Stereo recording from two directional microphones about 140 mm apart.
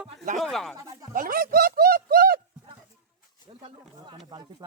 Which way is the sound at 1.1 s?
90° right.